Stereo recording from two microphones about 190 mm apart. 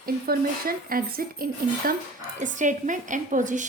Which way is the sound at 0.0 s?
50° right (ahead or behind).